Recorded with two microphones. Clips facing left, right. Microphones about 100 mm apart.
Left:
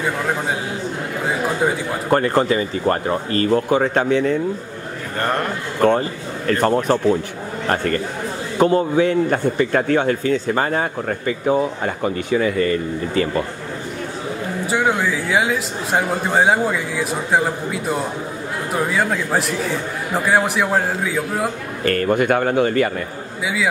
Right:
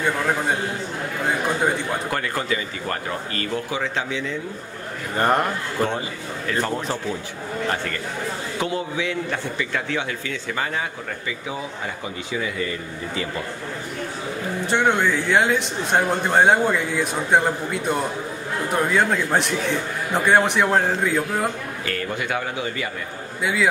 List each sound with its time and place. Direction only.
2.0 s speech: 35° left (ahead or behind)
5.9 s a man's voice: 55° left (ahead or behind)
14.7 s a man's voice: 5° left (ahead or behind)
21.8 s a man's voice: 50° left (ahead or behind)
23.4 s a man's voice: centre (ahead or behind)